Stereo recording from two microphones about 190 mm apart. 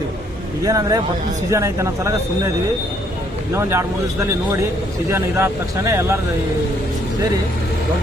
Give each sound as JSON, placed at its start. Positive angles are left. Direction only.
{"t": 0.6, "sound": "speech", "side_deg": -20}
{"t": 3.5, "sound": "speech", "side_deg": -15}
{"t": 5.1, "sound": "speech", "side_deg": -15}